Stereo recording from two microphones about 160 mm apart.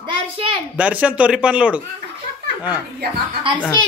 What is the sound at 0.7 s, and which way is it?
Speech, 10° right (ahead or behind).